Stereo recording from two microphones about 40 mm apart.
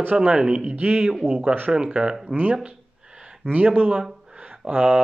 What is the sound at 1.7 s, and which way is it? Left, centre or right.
Speech, right.